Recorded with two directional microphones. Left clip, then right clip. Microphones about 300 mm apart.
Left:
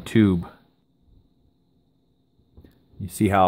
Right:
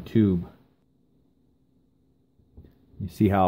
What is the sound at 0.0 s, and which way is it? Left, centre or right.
Speech, centre.